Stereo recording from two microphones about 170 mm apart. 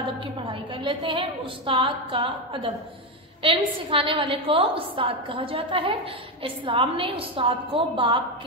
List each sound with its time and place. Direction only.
0.5 s a woman's voice: 30° right (ahead or behind)